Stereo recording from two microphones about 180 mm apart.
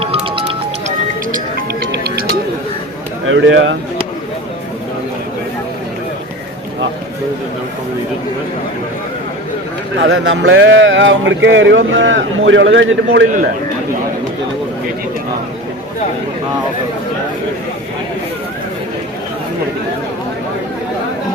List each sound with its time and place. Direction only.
0.0 s music: 30° right (ahead or behind)
3.2 s speech: 90° right
10.0 s speech: 90° right